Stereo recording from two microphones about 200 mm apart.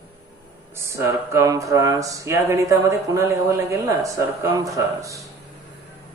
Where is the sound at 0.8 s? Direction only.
15° right (ahead or behind).